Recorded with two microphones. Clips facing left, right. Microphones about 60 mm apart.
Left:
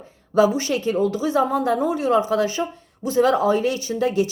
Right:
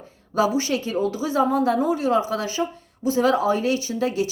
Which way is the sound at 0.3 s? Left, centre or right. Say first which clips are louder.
Left 3 dB; left.